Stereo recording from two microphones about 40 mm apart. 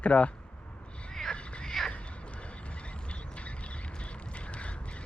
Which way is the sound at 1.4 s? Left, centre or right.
Left.